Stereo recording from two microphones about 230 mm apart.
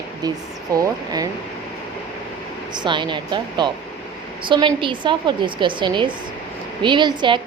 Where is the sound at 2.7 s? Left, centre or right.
Centre.